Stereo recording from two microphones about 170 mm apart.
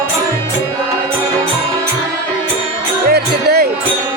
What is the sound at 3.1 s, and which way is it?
Music, 70° right (ahead or behind).